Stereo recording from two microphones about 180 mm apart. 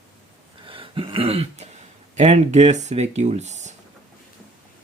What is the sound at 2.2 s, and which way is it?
Speech, 40° right (ahead or behind).